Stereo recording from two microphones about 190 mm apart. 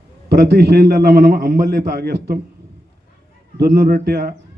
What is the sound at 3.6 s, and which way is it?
Speech, 55° right (ahead or behind).